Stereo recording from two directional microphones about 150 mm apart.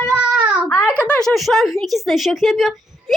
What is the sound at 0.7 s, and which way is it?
Speech, 15° left (ahead or behind).